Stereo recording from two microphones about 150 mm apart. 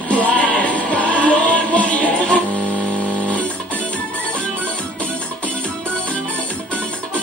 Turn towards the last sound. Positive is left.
turn(degrees=10)  # may be behind; listen again after turning